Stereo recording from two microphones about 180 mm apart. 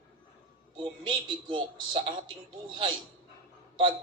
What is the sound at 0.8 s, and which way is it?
Speech, 25° right (ahead or behind).